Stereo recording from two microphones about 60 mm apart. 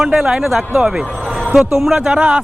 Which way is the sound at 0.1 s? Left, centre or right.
Centre.